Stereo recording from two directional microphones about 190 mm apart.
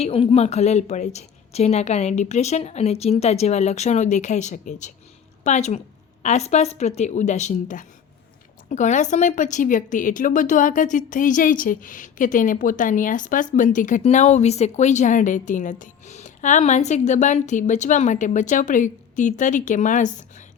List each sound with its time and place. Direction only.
0.0 s a woman's voice: 30° left (ahead or behind)